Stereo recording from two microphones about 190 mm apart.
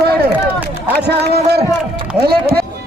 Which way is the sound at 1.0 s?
55° right (ahead or behind).